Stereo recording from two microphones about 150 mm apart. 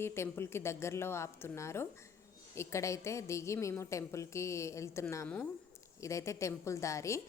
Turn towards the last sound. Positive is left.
turn(degrees=20)  # may be behind; listen again after turning